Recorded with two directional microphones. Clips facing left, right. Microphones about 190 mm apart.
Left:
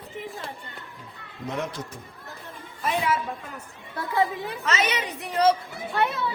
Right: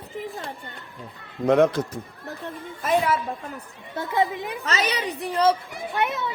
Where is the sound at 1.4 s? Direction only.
65° right (ahead or behind).